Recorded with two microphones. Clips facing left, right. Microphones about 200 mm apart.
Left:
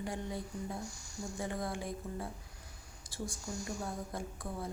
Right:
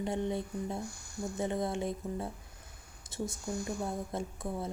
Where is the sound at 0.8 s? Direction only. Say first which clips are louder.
Right 4 dB; 55° right (ahead or behind).